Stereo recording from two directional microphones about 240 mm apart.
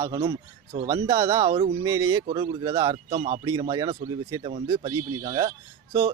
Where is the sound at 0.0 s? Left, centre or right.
Centre.